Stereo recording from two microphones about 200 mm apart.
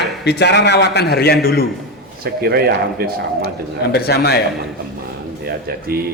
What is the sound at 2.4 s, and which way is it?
Speech, 50° right (ahead or behind).